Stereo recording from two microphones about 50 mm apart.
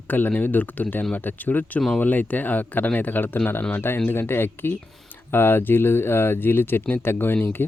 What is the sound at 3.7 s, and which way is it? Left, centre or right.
Speech, left.